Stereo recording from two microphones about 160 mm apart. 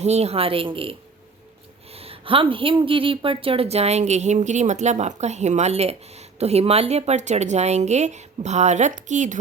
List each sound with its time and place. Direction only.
0.0 s speech: 40° right (ahead or behind)